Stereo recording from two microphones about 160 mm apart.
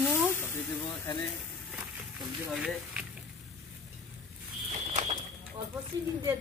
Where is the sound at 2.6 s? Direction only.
5° right (ahead or behind).